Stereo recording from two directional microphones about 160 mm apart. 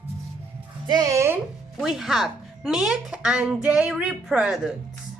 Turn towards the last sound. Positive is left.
turn(degrees=-5)  # may be behind; listen again after turning